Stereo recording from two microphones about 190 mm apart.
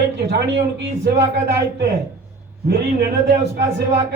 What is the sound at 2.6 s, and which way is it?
A man's voice, 60° right (ahead or behind).